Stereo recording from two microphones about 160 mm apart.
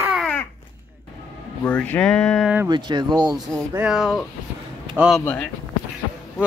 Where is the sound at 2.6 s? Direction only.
30° right (ahead or behind).